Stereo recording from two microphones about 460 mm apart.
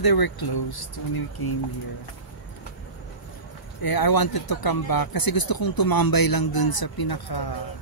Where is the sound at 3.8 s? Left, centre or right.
Left.